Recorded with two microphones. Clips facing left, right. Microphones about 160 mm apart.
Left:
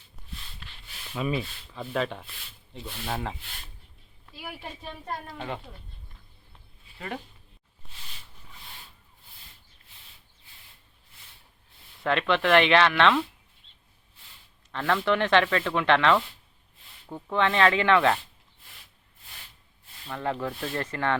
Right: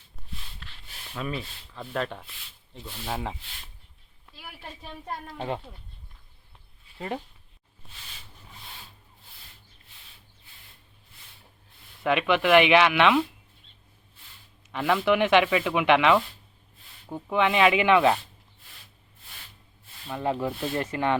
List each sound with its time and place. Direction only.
0.6 s a sound: 5° left (ahead or behind)
3.1 s speech: 5° right (ahead or behind)
12.0 s speech: 10° right (ahead or behind)
14.7 s speech: 10° right (ahead or behind)
20.1 s speech: 15° right (ahead or behind)